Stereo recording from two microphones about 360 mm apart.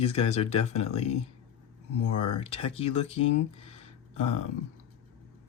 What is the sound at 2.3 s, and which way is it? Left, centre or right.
Speech, centre.